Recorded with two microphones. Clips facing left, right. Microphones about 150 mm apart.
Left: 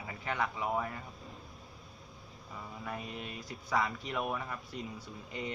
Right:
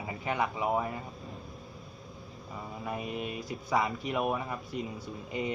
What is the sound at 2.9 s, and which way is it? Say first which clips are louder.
Speech: right 7 dB; 15° right (ahead or behind).